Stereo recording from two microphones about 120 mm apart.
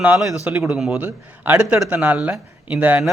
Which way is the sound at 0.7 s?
Centre (ahead or behind).